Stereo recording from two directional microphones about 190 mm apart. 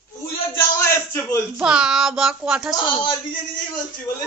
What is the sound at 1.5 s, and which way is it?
Speech, 5° right (ahead or behind).